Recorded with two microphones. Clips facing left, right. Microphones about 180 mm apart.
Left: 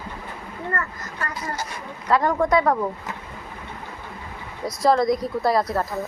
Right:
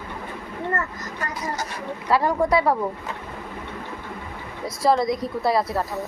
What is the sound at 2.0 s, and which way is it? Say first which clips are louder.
Speech: left 1 dB; 10° right (ahead or behind).